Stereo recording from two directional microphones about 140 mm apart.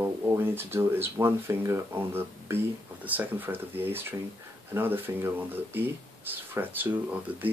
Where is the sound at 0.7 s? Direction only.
20° right (ahead or behind).